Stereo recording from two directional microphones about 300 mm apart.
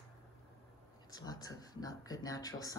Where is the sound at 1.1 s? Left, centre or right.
Centre.